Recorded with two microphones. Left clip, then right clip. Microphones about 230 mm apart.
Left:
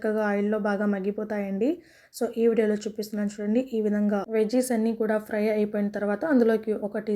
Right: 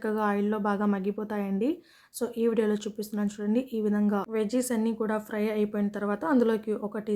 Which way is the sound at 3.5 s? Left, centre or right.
Right.